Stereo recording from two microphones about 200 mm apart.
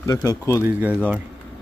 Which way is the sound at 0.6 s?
10° right (ahead or behind).